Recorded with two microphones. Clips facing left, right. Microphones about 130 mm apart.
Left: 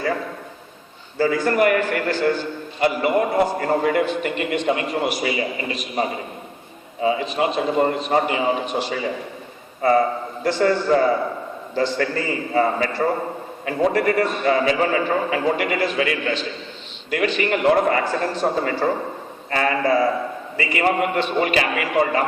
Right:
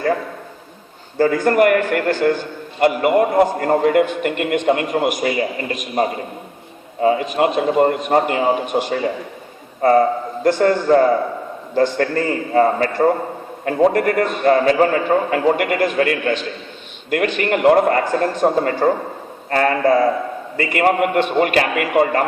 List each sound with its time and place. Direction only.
1.2 s a man's voice: 50° right (ahead or behind)